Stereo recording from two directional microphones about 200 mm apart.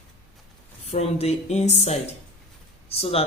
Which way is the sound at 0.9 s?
30° left (ahead or behind).